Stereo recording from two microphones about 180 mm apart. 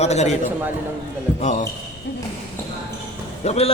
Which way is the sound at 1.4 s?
40° left (ahead or behind).